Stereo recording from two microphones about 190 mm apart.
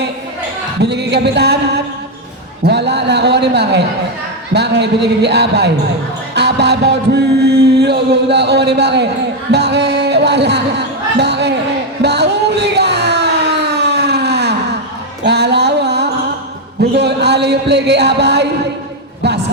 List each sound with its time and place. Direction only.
0.8 s music: 60° right (ahead or behind)
9.5 s a sound: 60° right (ahead or behind)
16.9 s music: 60° right (ahead or behind)